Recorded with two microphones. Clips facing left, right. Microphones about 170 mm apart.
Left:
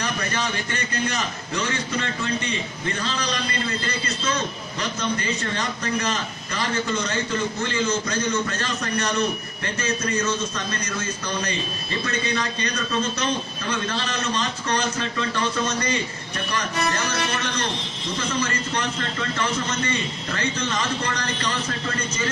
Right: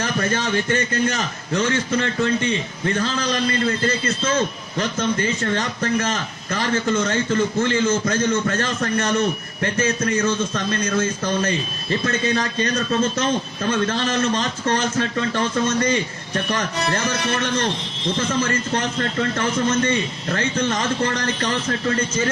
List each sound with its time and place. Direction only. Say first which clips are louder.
0.0 s a man's voice: right 4 dB; 45° right (ahead or behind)
12.0 s a man's voice: right 4 dB; 45° right (ahead or behind)
18.3 s a man's voice: right 2 dB; 50° right (ahead or behind)